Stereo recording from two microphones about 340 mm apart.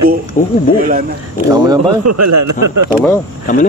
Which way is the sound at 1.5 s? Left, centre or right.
Centre.